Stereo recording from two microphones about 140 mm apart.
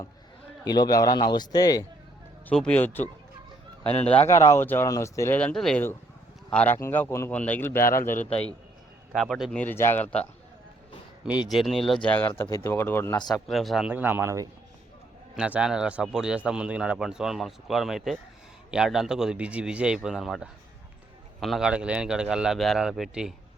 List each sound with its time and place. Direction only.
0.6 s speech: 30° left (ahead or behind)
2.5 s speech: 10° left (ahead or behind)
4.3 s speech: 20° left (ahead or behind)
5.4 s speech: 5° left (ahead or behind)
7.9 s a man's voice: 70° left (ahead or behind)
9.1 s speech: centre (ahead or behind)
11.4 s speech: centre (ahead or behind); by 13.1 s 15° left (ahead or behind)
13.1 s speech: 30° left (ahead or behind)
13.5 s speech: centre (ahead or behind)
13.8 s speech: 15° right (ahead or behind)
15.4 s speech: 10° right (ahead or behind)